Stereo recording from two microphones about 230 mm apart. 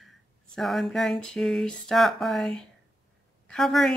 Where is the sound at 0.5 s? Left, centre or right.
Centre.